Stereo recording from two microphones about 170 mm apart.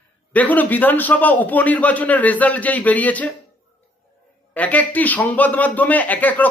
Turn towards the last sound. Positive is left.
turn(degrees=10)  # may be behind; listen again after turning